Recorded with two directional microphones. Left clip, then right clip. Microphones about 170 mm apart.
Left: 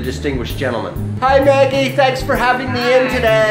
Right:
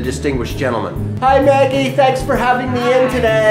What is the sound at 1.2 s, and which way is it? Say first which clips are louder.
Speech: even; 25° left (ahead or behind).